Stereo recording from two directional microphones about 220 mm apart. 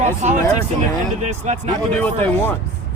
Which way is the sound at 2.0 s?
10° left (ahead or behind).